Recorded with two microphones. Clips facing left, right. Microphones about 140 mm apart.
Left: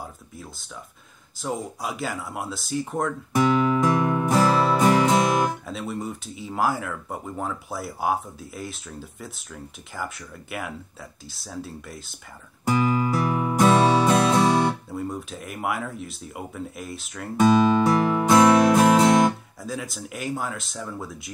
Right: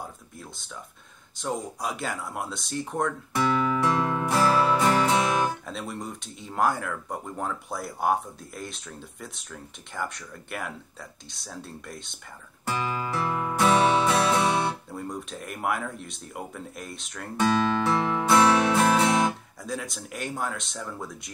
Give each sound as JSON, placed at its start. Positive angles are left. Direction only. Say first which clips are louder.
{"t": 0.0, "sound": "a sound", "louder": "left 1 dB", "side_deg": 0}
{"t": 1.4, "sound": "speech", "louder": "left 1 dB", "side_deg": 0}
{"t": 3.3, "sound": "music", "louder": "left 5 dB", "side_deg": 15}
{"t": 5.7, "sound": "speech", "louder": "left 4 dB", "side_deg": 0}
{"t": 12.6, "sound": "music", "louder": "left 7 dB", "side_deg": 15}
{"t": 14.9, "sound": "speech", "louder": "left 4 dB", "side_deg": 0}
{"t": 17.4, "sound": "music", "louder": "left 6 dB", "side_deg": 15}
{"t": 18.9, "sound": "music", "louder": "left 5 dB", "side_deg": 35}
{"t": 19.6, "sound": "speech", "louder": "left 2 dB", "side_deg": 0}